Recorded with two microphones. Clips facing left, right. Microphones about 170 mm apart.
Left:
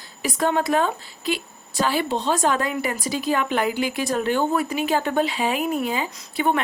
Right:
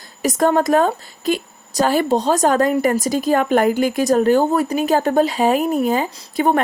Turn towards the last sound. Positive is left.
turn(degrees=-40)  # may be behind; listen again after turning